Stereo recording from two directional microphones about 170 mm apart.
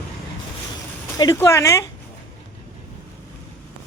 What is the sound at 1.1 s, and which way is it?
Speech, 20° left (ahead or behind).